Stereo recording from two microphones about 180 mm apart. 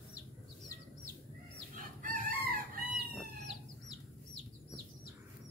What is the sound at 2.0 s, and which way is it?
Chicken, 50° right (ahead or behind).